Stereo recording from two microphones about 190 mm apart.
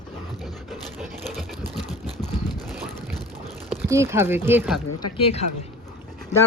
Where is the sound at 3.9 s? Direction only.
15° right (ahead or behind).